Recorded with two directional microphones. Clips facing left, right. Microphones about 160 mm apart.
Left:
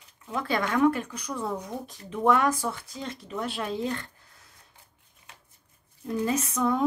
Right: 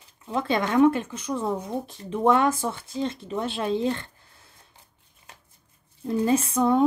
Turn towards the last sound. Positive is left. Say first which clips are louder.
# right 5 dB
turn(degrees=-30)  # may be behind; listen again after turning